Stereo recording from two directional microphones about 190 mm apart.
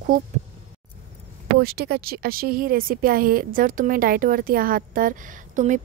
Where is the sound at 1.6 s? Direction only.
55° right (ahead or behind).